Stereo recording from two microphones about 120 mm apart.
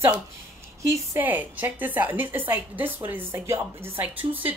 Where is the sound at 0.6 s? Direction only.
25° right (ahead or behind).